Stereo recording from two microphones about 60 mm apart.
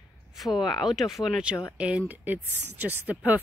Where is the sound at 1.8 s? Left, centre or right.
Centre.